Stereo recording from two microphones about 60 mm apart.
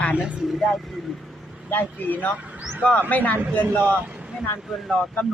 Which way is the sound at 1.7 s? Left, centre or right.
Left.